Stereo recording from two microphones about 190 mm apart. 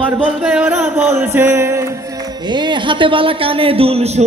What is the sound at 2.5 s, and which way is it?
Speech, 25° right (ahead or behind).